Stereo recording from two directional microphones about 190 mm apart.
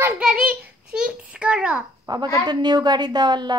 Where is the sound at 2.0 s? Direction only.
20° right (ahead or behind).